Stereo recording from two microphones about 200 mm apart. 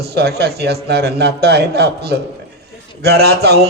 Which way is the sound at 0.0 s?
55° right (ahead or behind).